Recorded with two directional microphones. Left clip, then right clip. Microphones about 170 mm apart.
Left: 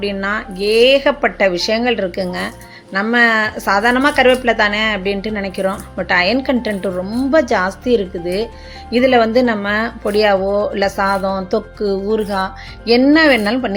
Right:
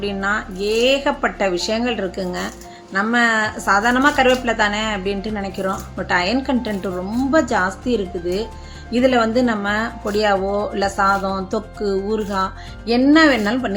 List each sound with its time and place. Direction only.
0.0 s speech: 15° left (ahead or behind)